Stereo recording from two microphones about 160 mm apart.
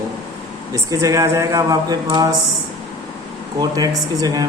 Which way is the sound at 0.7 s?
20° right (ahead or behind).